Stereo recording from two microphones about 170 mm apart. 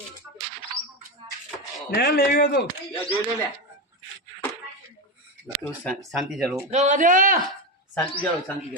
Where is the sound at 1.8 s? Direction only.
65° left (ahead or behind).